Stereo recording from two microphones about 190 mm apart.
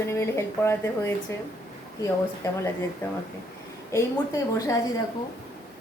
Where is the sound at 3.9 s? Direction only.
15° left (ahead or behind).